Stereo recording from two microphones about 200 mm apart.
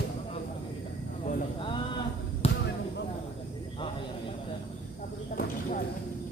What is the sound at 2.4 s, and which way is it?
Basketball bounce, 30° left (ahead or behind).